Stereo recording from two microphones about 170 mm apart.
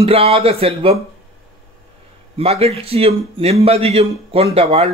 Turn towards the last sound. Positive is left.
turn(degrees=-40)  # may be behind; listen again after turning